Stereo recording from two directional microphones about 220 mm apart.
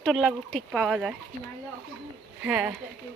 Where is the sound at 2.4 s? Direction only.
5° right (ahead or behind).